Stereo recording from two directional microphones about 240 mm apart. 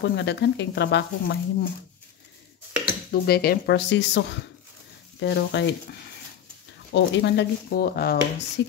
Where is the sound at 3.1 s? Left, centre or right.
Left.